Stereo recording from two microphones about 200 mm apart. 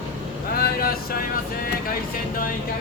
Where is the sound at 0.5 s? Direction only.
50° left (ahead or behind).